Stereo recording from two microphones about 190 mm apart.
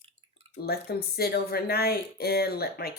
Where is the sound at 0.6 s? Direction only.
55° left (ahead or behind).